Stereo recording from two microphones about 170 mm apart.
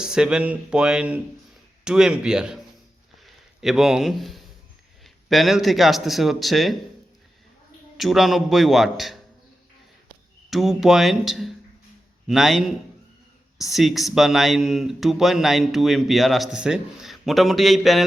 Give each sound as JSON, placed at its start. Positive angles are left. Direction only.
{"t": 0.0, "sound": "speech", "side_deg": -5}
{"t": 7.9, "sound": "speech", "side_deg": 0}